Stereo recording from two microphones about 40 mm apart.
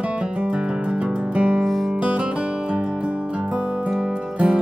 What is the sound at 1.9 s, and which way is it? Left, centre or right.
Music, right.